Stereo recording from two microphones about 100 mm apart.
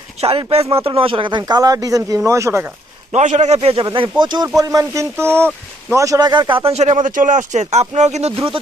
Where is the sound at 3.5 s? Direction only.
85° right.